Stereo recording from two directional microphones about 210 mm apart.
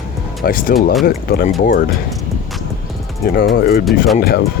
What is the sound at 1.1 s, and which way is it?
Speech, 45° left (ahead or behind).